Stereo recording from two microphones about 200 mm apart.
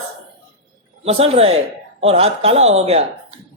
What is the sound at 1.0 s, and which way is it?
A woman's voice, 30° right (ahead or behind).